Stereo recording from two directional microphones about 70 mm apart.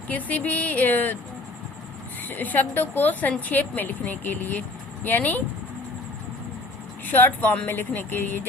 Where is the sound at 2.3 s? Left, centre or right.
Left.